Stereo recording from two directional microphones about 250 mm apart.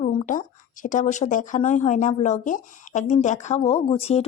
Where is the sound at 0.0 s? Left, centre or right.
Left.